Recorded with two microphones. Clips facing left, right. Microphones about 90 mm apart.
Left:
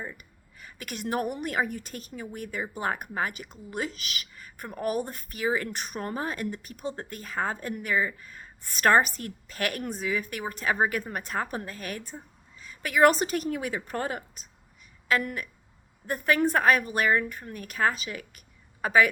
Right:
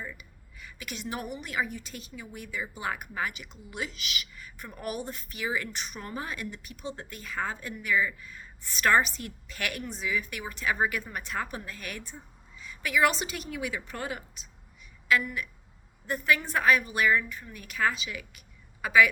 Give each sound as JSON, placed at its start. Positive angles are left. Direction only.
{"t": 0.2, "sound": "a woman's voice", "side_deg": 45}
{"t": 15.2, "sound": "a woman's voice", "side_deg": 55}